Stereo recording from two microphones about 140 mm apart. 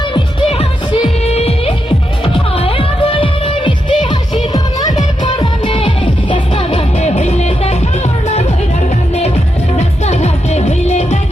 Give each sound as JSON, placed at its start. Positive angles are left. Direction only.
{"t": 1.2, "sound": "music", "side_deg": 50}
{"t": 9.7, "sound": "music", "side_deg": 50}